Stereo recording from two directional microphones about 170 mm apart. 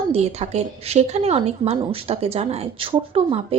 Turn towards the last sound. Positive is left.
turn(degrees=-35)  # may be behind; listen again after turning